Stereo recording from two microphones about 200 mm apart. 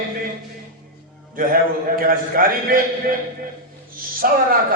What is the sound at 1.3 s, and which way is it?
A man's voice, 45° right (ahead or behind).